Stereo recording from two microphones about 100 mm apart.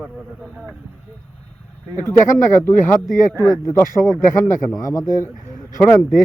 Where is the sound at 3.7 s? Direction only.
30° left (ahead or behind).